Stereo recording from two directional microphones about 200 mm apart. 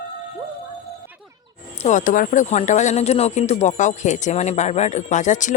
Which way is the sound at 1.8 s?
40° left (ahead or behind).